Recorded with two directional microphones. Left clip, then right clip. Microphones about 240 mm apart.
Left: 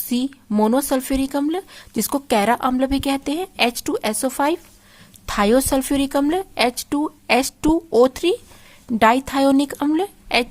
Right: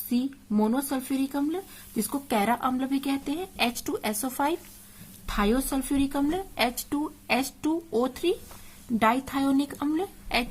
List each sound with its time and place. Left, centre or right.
0.1 s speech: left